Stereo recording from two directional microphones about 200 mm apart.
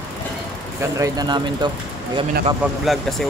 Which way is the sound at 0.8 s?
15° right (ahead or behind).